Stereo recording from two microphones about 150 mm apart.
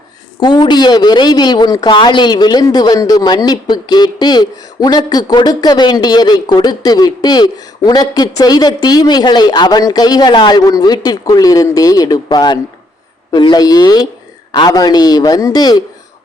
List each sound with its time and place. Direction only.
0.3 s a woman's voice: 30° left (ahead or behind)